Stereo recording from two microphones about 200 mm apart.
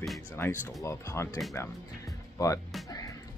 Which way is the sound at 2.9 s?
15° left (ahead or behind).